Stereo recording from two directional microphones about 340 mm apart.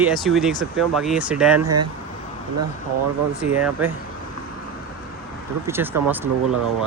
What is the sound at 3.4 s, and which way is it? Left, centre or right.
Speech, centre.